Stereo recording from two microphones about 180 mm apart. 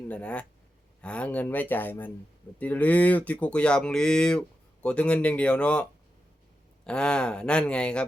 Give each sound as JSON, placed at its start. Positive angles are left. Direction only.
{"t": 0.1, "sound": "speech", "side_deg": 5}